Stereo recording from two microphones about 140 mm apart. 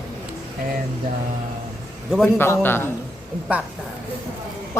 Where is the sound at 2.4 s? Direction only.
15° left (ahead or behind).